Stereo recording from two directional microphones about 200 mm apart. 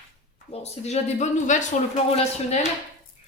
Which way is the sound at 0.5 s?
30° left (ahead or behind).